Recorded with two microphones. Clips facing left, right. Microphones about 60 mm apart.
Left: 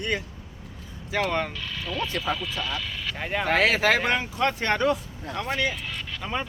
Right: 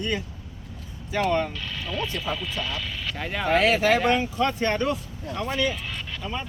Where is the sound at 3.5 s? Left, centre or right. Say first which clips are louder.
Right 2 dB; left.